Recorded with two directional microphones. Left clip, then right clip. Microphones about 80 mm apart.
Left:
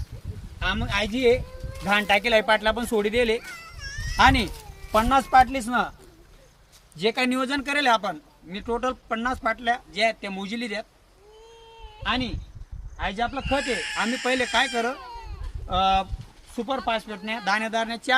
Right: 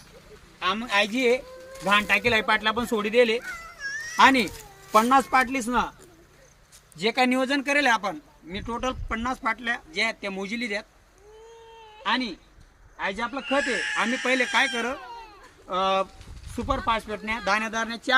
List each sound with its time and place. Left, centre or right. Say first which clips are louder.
0.6 s a man's voice: right 2 dB; left
2.0 s speech: left 3 dB; left
4.2 s speech: right 1 dB; left
4.9 s speech: right 2 dB; left
5.3 s speech: left 5 dB; left
6.9 s speech: right 1 dB; left
12.0 s a man's voice: right 1 dB; left
13.7 s speech: right 1 dB; centre
14.5 s speech: left 1 dB; left
14.9 s a sound: even; centre
15.7 s a man's voice: left 2 dB; left; by 18.2 s centre